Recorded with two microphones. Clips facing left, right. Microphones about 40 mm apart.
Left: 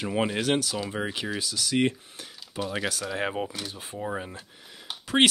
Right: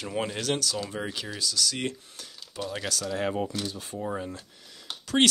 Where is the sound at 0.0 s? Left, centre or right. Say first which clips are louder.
Left 4 dB; centre.